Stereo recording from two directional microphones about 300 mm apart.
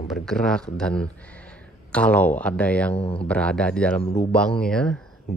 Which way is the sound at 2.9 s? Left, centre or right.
Centre.